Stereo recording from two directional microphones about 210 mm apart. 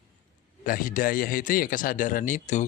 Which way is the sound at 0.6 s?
40° left (ahead or behind).